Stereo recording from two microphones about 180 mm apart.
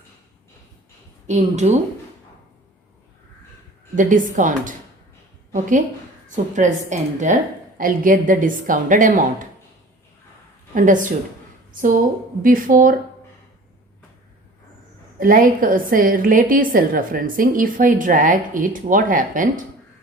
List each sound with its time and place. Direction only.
1.3 s a woman's voice: 40° right (ahead or behind)
3.9 s a woman's voice: 45° right (ahead or behind)
6.2 s a woman's voice: 45° right (ahead or behind)
10.8 s a woman's voice: 45° right (ahead or behind)
15.2 s a woman's voice: 50° right (ahead or behind)